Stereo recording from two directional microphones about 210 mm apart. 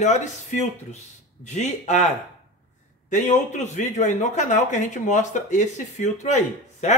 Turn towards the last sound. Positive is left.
turn(degrees=35)  # may be behind; listen again after turning